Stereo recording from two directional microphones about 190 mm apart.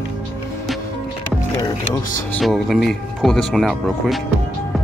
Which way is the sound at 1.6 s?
20° left (ahead or behind).